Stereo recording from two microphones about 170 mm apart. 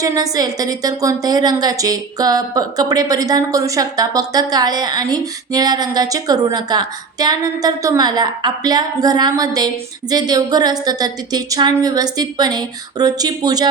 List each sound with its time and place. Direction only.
0.0 s a woman's voice: 20° right (ahead or behind)